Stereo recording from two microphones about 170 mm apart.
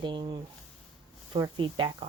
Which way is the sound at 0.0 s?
25° right (ahead or behind).